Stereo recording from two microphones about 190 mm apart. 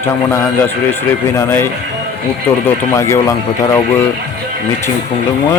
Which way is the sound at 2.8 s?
15° left (ahead or behind).